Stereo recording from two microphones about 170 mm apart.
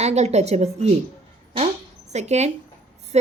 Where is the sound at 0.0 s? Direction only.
40° right (ahead or behind).